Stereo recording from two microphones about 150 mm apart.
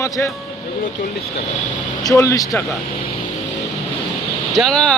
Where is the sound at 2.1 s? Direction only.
20° left (ahead or behind).